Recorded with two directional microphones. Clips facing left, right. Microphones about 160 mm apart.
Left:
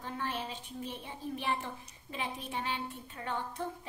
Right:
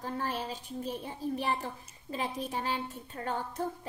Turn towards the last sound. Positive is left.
turn(degrees=-40)  # may be behind; listen again after turning